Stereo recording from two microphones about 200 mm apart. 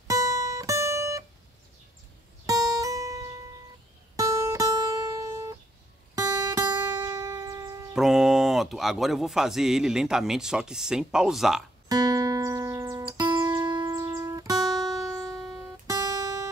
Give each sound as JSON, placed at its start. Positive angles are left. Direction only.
{"t": 0.1, "sound": "guitar", "side_deg": -15}
{"t": 2.4, "sound": "music", "side_deg": -20}
{"t": 7.9, "sound": "speech", "side_deg": 0}
{"t": 11.9, "sound": "music", "side_deg": -20}
{"t": 15.3, "sound": "music", "side_deg": 0}
{"t": 15.9, "sound": "guitar", "side_deg": -15}